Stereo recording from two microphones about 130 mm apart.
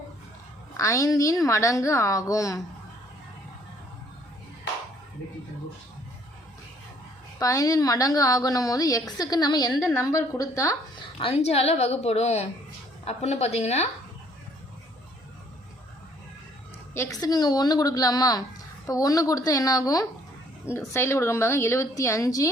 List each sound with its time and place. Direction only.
0.8 s a woman's voice: 25° left (ahead or behind)
7.3 s a woman's voice: 25° left (ahead or behind)
11.2 s a woman's voice: 50° left (ahead or behind)
16.9 s a woman's voice: 25° left (ahead or behind)